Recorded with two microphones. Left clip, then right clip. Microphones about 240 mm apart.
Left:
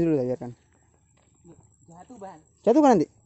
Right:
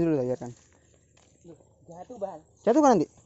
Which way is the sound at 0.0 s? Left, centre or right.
Left.